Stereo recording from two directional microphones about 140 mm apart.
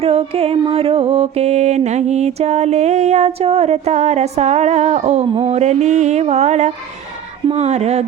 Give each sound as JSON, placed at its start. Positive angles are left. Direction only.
{"t": 0.0, "sound": "mantra", "side_deg": -45}